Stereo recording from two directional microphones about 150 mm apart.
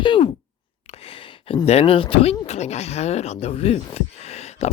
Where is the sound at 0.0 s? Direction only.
30° left (ahead or behind).